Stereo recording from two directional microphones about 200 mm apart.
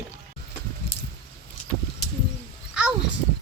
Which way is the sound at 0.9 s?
50° left (ahead or behind).